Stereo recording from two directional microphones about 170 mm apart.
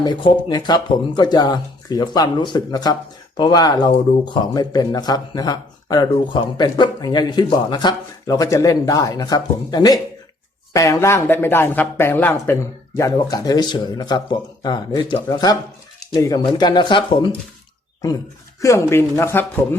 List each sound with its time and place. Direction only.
0.0 s speech: 25° left (ahead or behind)
18.6 s speech: 15° left (ahead or behind)